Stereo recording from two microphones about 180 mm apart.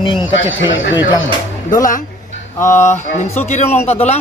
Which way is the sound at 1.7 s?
50° left (ahead or behind).